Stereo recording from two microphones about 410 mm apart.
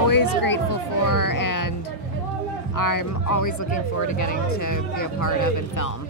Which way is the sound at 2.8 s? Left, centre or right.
Left.